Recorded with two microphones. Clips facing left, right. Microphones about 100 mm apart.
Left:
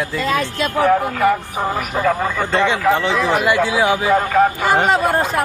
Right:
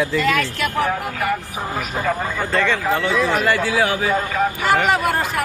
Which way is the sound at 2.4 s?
30° left (ahead or behind).